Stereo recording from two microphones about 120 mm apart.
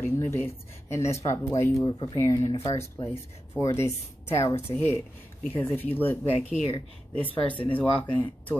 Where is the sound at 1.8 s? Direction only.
40° left (ahead or behind).